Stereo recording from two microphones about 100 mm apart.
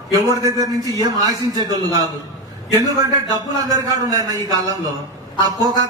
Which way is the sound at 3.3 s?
40° right (ahead or behind).